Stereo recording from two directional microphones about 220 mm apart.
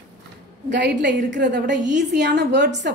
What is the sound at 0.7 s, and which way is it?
Speech, 50° right (ahead or behind).